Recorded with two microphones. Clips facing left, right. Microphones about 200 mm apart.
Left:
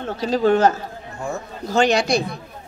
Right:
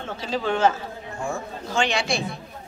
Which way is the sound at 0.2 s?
40° left (ahead or behind).